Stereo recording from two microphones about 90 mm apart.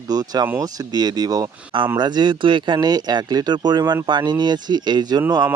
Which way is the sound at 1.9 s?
55° right (ahead or behind).